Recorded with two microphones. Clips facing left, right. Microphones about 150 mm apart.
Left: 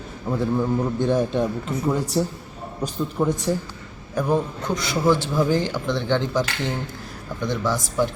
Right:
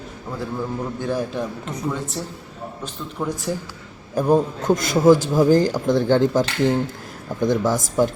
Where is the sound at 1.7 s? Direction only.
20° right (ahead or behind).